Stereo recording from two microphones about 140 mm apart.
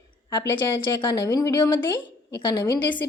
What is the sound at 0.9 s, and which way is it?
A woman's voice, 25° left (ahead or behind).